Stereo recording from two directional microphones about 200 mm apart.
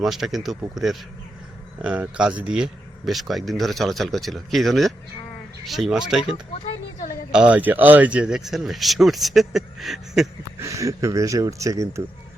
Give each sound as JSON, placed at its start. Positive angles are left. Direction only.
{"t": 0.0, "sound": "speech", "side_deg": 0}
{"t": 1.8, "sound": "speech", "side_deg": -5}
{"t": 7.3, "sound": "speech", "side_deg": -5}
{"t": 10.6, "sound": "speech", "side_deg": -15}